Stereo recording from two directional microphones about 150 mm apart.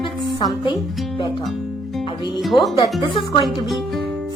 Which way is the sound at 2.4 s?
Centre (ahead or behind).